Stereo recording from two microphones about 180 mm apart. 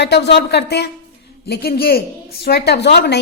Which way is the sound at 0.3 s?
65° left (ahead or behind).